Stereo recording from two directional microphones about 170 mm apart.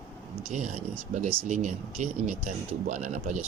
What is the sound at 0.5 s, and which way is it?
Speech, 45° right (ahead or behind).